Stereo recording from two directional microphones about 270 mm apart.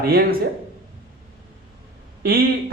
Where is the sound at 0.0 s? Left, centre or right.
Right.